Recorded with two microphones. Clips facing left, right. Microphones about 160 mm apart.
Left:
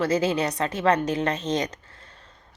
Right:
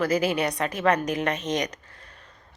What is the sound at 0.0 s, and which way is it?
A woman's voice, 25° left (ahead or behind).